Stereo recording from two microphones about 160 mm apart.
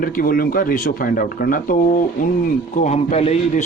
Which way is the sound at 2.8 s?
45° left (ahead or behind).